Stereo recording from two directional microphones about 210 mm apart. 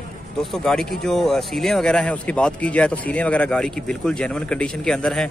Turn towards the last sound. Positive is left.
turn(degrees=5)  # may be behind; listen again after turning